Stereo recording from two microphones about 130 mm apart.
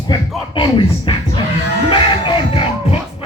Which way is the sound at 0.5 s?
40° left (ahead or behind).